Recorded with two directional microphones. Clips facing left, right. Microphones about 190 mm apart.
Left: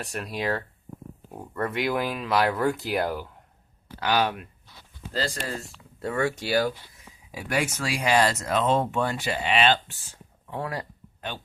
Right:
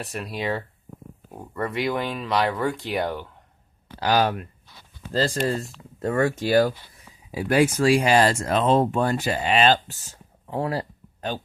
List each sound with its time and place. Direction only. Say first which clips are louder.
0.0 s speech: right 1 dB; centre (ahead or behind)
4.0 s speech: right 3 dB; 40° right (ahead or behind)
5.0 s speech: right 6 dB; 50° right (ahead or behind)
5.4 s speech: right 9 dB; 40° right (ahead or behind)
7.3 s speech: right 8 dB; 30° right (ahead or behind)